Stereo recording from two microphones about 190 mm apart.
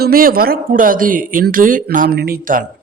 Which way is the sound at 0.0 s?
50° right (ahead or behind).